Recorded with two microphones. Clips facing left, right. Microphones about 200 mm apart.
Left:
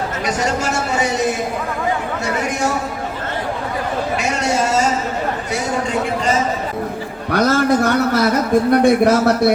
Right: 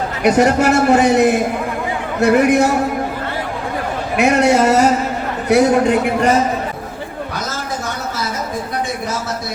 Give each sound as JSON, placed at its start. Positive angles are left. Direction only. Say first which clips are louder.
{"t": 0.2, "sound": "a man's voice", "louder": "right 10 dB", "side_deg": -60}
{"t": 4.2, "sound": "a man's voice", "louder": "right 10 dB", "side_deg": -60}
{"t": 7.3, "sound": "speech", "louder": "left 14 dB", "side_deg": 65}